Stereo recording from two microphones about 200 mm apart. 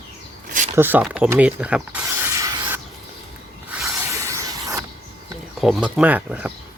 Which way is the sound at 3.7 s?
10° right (ahead or behind).